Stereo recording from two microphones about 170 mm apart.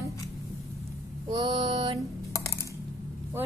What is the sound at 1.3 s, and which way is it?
Mantra, 25° right (ahead or behind).